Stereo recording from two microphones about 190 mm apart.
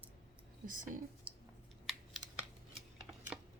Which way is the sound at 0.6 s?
45° right (ahead or behind).